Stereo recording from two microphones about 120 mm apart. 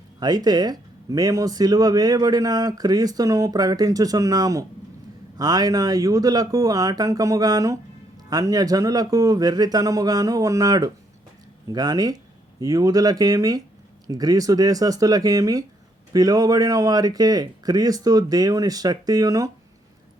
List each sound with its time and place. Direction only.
0.2 s speech: 35° right (ahead or behind)